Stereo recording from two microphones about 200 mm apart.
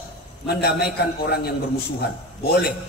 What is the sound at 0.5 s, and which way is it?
A man's voice, 50° left (ahead or behind).